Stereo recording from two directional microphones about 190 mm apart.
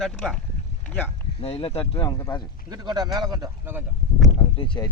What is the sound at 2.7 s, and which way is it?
A man's voice, 20° right (ahead or behind).